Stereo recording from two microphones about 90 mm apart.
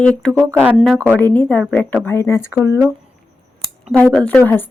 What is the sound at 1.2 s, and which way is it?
Speech, 20° left (ahead or behind).